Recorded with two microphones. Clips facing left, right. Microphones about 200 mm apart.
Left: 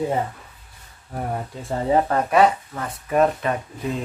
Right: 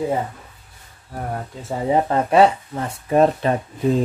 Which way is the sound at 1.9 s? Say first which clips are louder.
Right 2 dB; 25° right (ahead or behind).